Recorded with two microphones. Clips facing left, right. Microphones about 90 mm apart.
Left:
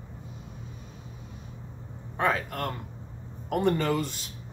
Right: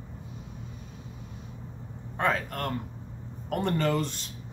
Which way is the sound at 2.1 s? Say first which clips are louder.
Left 1 dB; 5° left (ahead or behind).